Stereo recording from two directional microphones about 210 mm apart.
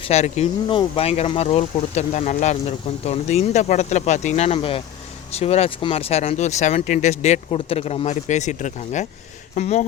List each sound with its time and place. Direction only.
0.0 s speech: 30° left (ahead or behind)